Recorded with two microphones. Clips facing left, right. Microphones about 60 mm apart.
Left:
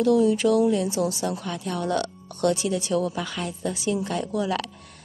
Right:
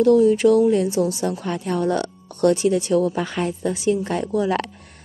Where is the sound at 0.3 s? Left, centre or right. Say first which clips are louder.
Right 5 dB; right.